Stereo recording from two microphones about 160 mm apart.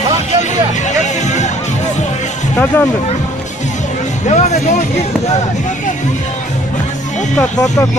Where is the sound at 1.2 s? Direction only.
45° left (ahead or behind).